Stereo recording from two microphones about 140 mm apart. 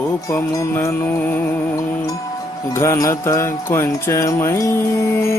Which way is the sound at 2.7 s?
20° left (ahead or behind).